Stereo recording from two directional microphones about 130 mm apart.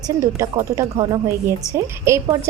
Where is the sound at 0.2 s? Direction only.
25° right (ahead or behind).